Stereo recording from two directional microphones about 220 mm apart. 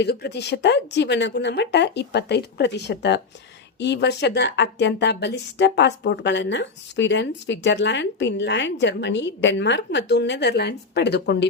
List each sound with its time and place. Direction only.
0.0 s speech: 50° left (ahead or behind)